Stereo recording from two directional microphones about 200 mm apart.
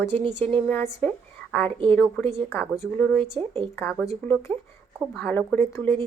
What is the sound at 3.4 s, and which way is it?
Speech, 25° right (ahead or behind).